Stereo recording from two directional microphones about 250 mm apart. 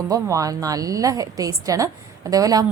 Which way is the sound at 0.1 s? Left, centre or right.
Centre.